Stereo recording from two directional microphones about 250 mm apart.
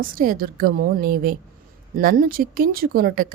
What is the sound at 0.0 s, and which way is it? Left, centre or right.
A woman's voice, right.